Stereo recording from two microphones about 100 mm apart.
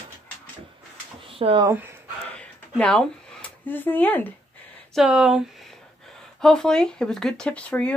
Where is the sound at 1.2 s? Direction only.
65° right (ahead or behind).